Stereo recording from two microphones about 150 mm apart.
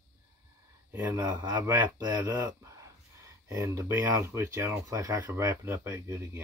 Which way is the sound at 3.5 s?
20° right (ahead or behind).